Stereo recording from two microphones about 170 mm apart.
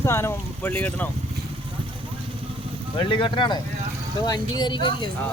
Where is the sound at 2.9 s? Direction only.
30° left (ahead or behind).